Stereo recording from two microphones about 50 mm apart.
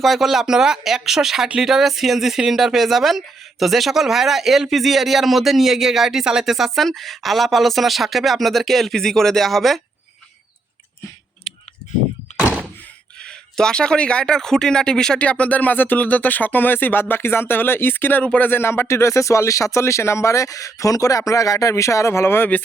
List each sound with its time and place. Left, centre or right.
0.0 s speech: centre
13.2 s speech: centre
15.2 s speech: left
18.2 s speech: left
18.4 s speech: left